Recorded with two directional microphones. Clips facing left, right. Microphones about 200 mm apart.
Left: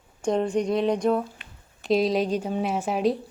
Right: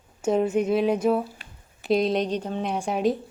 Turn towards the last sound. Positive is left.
turn(degrees=0)  # may be behind; listen again after turning